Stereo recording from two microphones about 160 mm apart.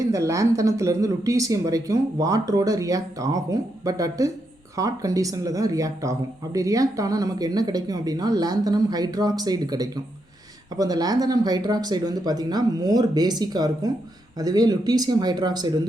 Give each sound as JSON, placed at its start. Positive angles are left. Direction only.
{"t": 0.0, "sound": "speech", "side_deg": -20}